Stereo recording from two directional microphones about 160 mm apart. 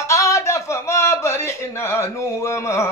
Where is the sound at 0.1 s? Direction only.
20° left (ahead or behind).